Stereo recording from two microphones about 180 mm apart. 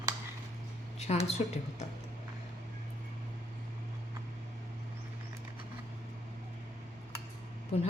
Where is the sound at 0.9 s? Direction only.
35° left (ahead or behind).